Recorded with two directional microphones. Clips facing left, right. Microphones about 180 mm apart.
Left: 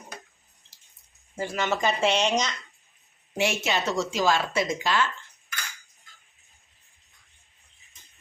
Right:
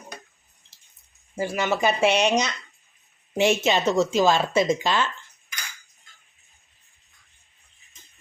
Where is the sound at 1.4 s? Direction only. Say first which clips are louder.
Right 3 dB; 10° right (ahead or behind).